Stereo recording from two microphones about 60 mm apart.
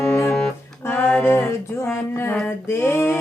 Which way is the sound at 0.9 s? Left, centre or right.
Left.